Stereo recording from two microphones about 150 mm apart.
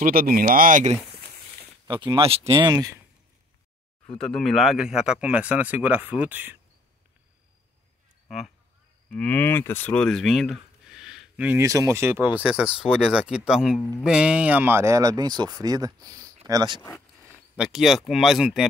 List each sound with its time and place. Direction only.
0.0 s speech: 75° right (ahead or behind)
1.9 s speech: 35° right (ahead or behind)
2.5 s speech: 25° right (ahead or behind)
4.1 s speech: 5° left (ahead or behind); by 6.6 s 10° right (ahead or behind)
9.1 s speech: 10° left (ahead or behind); by 11.6 s 10° right (ahead or behind)
11.6 s speech: 20° right (ahead or behind)
17.6 s speech: 5° right (ahead or behind)